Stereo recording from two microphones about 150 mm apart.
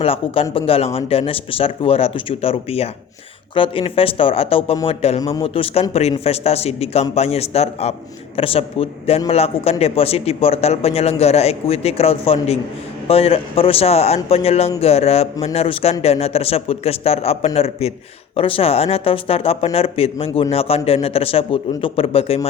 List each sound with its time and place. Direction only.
0.0 s a man's voice: 40° left (ahead or behind)